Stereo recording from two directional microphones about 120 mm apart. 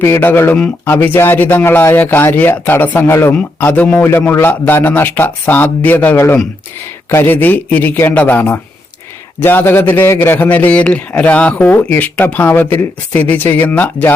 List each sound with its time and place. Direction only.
0.0 s a man's voice: 20° left (ahead or behind)